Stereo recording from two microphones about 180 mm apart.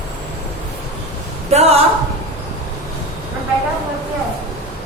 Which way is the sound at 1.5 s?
35° right (ahead or behind).